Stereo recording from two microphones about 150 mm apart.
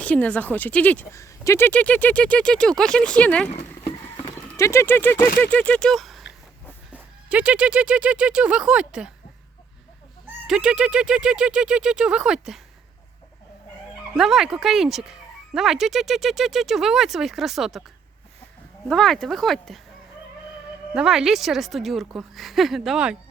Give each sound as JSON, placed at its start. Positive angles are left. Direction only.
{"t": 0.0, "sound": "speech", "side_deg": 10}
{"t": 1.1, "sound": "speech", "side_deg": 20}
{"t": 4.5, "sound": "speech", "side_deg": 20}
{"t": 10.4, "sound": "speech", "side_deg": -5}
{"t": 14.1, "sound": "speech", "side_deg": 0}
{"t": 18.9, "sound": "speech", "side_deg": 0}
{"t": 20.9, "sound": "speech", "side_deg": -5}